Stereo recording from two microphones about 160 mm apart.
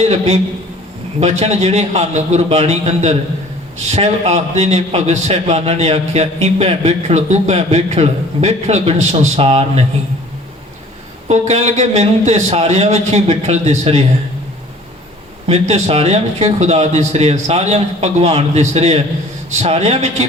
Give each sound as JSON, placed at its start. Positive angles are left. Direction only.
{"t": 1.2, "sound": "a man's voice", "side_deg": -45}
{"t": 11.3, "sound": "a man's voice", "side_deg": -45}
{"t": 15.4, "sound": "a man's voice", "side_deg": -40}